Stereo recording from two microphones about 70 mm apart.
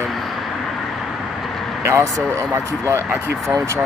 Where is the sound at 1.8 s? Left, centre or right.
Right.